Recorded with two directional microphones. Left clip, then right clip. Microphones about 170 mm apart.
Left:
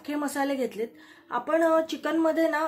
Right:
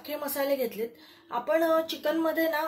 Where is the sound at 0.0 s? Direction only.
40° left (ahead or behind).